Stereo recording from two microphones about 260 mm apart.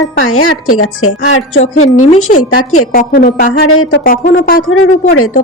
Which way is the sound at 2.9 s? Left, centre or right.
Left.